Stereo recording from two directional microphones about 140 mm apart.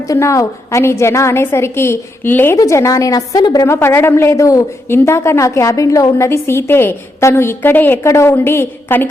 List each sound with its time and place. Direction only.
0.1 s a woman's voice: 25° left (ahead or behind)